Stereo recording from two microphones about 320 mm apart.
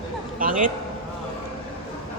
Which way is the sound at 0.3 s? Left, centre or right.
Right.